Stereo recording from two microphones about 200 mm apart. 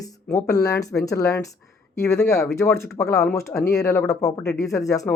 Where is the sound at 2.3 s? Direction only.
5° left (ahead or behind).